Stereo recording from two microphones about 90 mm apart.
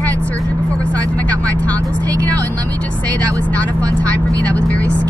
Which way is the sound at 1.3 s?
15° left (ahead or behind).